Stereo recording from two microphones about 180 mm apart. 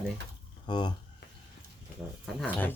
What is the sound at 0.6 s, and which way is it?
Speech, 25° left (ahead or behind).